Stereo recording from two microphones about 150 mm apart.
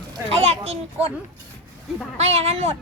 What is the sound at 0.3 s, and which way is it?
Children playing, 45° right (ahead or behind).